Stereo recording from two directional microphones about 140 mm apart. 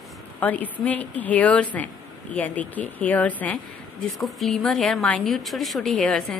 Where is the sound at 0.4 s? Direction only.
10° left (ahead or behind).